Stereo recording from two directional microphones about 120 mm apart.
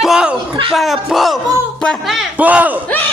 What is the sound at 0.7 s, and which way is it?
A child's voice, centre (ahead or behind).